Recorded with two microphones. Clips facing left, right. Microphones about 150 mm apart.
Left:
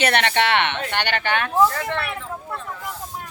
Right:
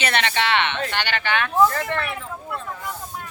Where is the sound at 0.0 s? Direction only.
55° left (ahead or behind).